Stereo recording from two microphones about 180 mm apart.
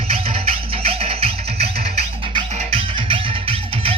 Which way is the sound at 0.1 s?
30° right (ahead or behind).